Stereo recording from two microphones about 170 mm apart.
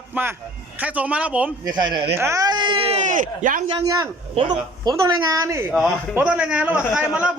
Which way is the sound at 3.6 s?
25° right (ahead or behind).